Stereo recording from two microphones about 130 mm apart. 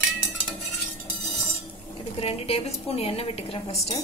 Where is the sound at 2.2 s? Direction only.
50° left (ahead or behind).